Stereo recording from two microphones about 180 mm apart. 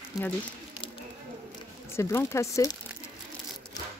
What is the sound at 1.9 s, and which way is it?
Speech, 15° left (ahead or behind).